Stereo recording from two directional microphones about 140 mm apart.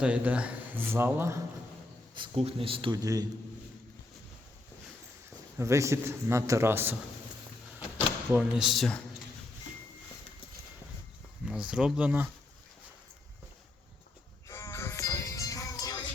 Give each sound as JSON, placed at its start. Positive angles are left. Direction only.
{"t": 0.0, "sound": "speech", "side_deg": -10}
{"t": 2.1, "sound": "speech", "side_deg": -40}
{"t": 3.0, "sound": "a man's voice", "side_deg": -25}
{"t": 5.5, "sound": "a man's voice", "side_deg": -20}
{"t": 7.8, "sound": "a sound", "side_deg": -5}
{"t": 11.4, "sound": "speech", "side_deg": -5}
{"t": 14.4, "sound": "music", "side_deg": 20}